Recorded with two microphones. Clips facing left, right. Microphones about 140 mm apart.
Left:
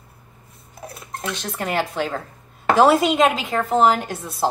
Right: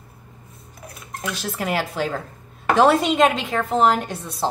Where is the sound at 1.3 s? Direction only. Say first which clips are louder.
Even; 5° right (ahead or behind).